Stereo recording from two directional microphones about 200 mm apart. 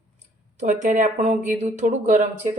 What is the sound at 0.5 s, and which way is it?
Speech, 40° right (ahead or behind).